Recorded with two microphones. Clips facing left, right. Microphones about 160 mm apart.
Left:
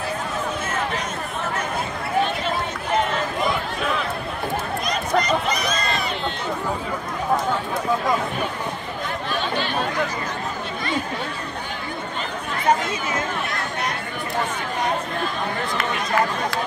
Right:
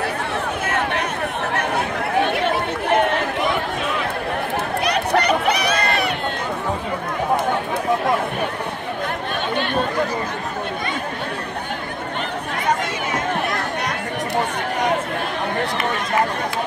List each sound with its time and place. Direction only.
0.7 s a sound: 65° right (ahead or behind)
1.5 s chatter: 65° right (ahead or behind)
4.8 s run: 70° right (ahead or behind)